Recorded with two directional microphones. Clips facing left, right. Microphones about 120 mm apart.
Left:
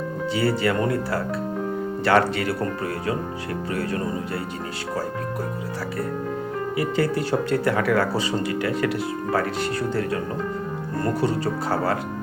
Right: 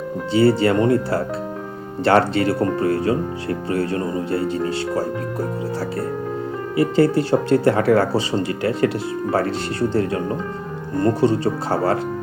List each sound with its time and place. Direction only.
0.3 s speech: 30° right (ahead or behind)
6.7 s speech: 30° right (ahead or behind)
11.0 s speech: 25° right (ahead or behind)